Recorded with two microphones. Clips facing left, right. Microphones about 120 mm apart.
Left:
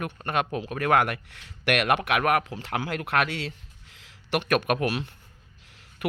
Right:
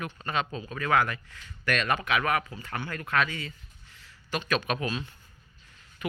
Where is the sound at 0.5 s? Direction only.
65° left (ahead or behind).